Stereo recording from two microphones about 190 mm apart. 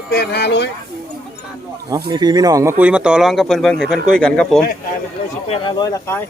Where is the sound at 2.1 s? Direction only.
20° right (ahead or behind); by 4.6 s 5° left (ahead or behind).